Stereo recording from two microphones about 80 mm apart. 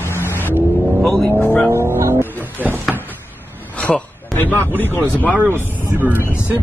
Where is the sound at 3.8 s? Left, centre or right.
Left.